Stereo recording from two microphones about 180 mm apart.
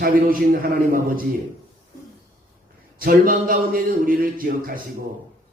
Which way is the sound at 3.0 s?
50° right (ahead or behind).